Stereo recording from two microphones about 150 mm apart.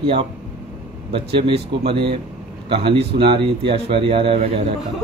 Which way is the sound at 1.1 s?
40° right (ahead or behind).